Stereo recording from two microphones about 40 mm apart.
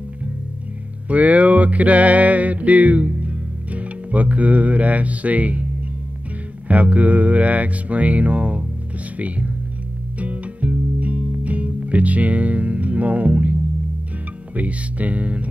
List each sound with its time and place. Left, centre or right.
1.0 s music: right
6.7 s speech: right
10.1 s music: right
14.5 s speech: right